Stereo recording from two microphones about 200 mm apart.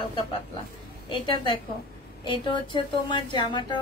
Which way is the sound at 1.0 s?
25° left (ahead or behind).